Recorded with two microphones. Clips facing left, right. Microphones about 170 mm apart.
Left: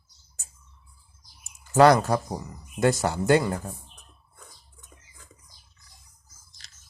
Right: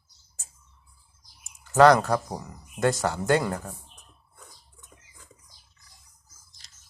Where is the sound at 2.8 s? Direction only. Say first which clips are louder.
Left 2 dB; 10° left (ahead or behind).